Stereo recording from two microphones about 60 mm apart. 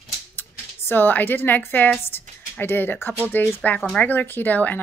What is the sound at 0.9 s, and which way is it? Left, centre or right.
A woman's voice, left.